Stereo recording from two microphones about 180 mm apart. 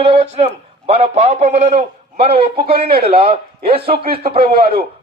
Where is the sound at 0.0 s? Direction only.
35° right (ahead or behind).